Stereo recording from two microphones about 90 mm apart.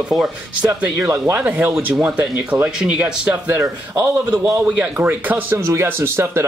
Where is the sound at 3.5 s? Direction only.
35° right (ahead or behind).